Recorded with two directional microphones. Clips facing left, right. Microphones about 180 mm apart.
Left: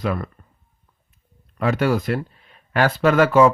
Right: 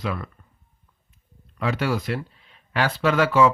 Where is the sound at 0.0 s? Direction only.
50° left (ahead or behind).